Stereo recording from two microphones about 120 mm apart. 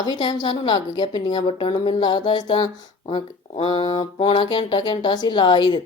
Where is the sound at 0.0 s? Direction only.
35° left (ahead or behind).